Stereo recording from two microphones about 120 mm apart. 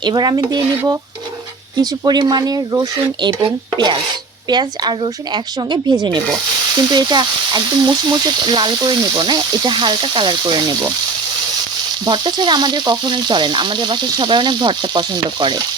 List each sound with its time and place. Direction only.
0.0 s speech: 35° right (ahead or behind)
1.7 s speech: 35° right (ahead or behind)
12.0 s speech: 40° right (ahead or behind)